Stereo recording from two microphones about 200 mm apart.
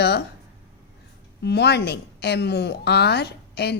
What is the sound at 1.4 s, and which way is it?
A woman's voice, 55° left (ahead or behind).